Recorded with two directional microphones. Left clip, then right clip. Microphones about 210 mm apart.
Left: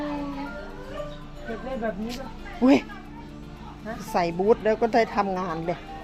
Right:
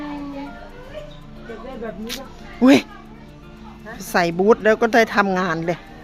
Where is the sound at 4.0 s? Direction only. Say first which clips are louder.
Right 6 dB; 40° right (ahead or behind).